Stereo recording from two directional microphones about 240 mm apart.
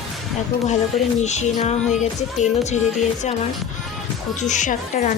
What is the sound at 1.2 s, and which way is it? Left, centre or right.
Music, left.